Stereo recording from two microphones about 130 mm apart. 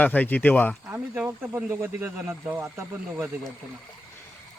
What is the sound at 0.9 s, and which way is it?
Speech, 15° right (ahead or behind).